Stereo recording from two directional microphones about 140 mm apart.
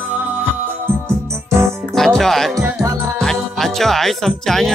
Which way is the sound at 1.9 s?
5° left (ahead or behind).